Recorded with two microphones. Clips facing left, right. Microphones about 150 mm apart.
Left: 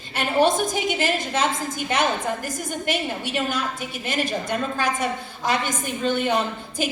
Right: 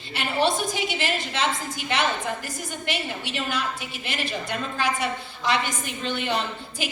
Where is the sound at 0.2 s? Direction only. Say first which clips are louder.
Left 4 dB; 45° left (ahead or behind).